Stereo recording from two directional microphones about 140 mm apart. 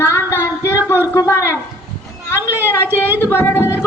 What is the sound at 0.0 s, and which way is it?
Child singing, 20° left (ahead or behind).